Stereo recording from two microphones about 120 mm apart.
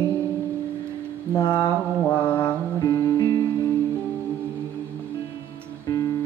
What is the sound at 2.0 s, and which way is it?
Mantra, 15° left (ahead or behind).